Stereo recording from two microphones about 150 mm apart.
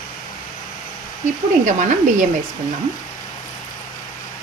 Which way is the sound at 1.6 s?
55° right (ahead or behind).